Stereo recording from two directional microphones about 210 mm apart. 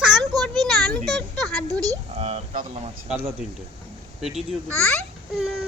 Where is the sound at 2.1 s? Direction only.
30° right (ahead or behind).